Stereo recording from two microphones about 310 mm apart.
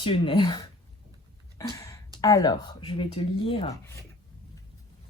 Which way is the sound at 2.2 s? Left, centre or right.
Centre.